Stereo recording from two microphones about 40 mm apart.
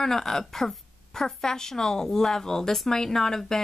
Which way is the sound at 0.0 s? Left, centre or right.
Centre.